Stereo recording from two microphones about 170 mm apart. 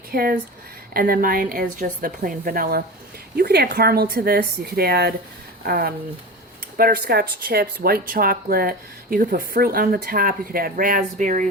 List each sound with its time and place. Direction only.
0.1 s speech: 60° right (ahead or behind)